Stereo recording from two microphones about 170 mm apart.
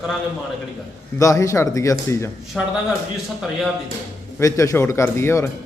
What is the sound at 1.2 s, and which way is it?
Speech, 20° left (ahead or behind).